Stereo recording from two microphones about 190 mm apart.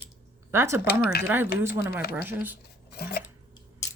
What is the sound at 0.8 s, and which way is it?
Speech, 55° left (ahead or behind).